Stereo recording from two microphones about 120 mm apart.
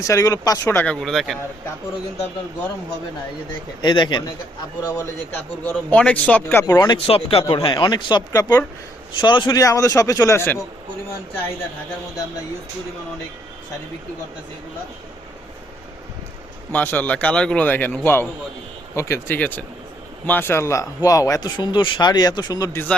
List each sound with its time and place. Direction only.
0.0 s speech: 25° left (ahead or behind)
0.8 s speech: 10° left (ahead or behind)
3.8 s speech: 40° left (ahead or behind)
4.9 s speech: 25° left (ahead or behind)
5.6 s a man's voice: 10° left (ahead or behind)
6.7 s speech: 35° left (ahead or behind)
7.1 s speech: 55° left (ahead or behind)
7.5 s speech: 45° left (ahead or behind)
9.1 s speech: 40° left (ahead or behind)
9.6 s speech: 25° left (ahead or behind)
16.7 s a man's voice: 15° left (ahead or behind); by 22.8 s 30° left (ahead or behind)